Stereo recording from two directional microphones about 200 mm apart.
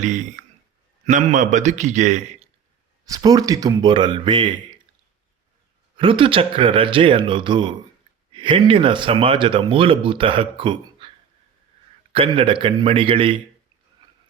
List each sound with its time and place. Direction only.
0.0 s a man's voice: 35° right (ahead or behind)
3.1 s speech: 20° right (ahead or behind)
6.0 s speech: 25° right (ahead or behind)
12.1 s speech: 25° right (ahead or behind)